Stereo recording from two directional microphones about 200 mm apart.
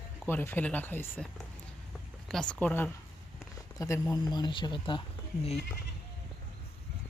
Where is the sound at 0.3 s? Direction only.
10° left (ahead or behind); by 5.5 s 25° left (ahead or behind).